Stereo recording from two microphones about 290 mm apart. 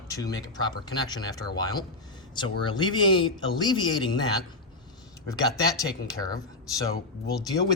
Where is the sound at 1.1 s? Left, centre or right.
Centre.